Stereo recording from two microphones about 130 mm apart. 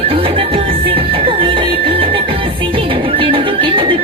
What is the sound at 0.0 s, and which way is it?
Music, 45° right (ahead or behind).